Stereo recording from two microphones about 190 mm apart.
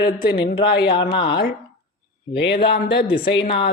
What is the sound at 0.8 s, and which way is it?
Speech, 25° left (ahead or behind).